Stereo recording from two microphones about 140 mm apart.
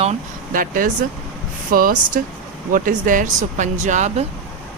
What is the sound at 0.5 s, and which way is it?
Speech, 80° right.